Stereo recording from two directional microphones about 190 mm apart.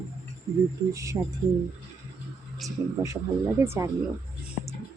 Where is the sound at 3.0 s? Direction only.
15° right (ahead or behind).